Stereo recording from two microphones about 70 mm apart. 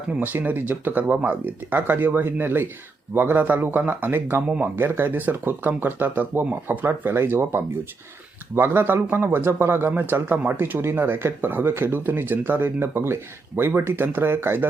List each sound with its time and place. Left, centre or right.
0.3 s speech: right